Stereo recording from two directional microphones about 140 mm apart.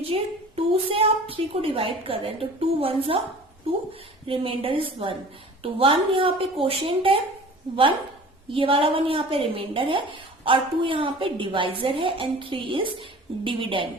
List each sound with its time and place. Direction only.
0.0 s a sound: 45° right (ahead or behind)
4.3 s a woman's voice: 40° right (ahead or behind)
8.4 s a woman's voice: 40° right (ahead or behind)